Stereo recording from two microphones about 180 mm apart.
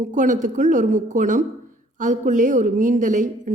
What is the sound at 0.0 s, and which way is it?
A woman's voice, 45° right (ahead or behind).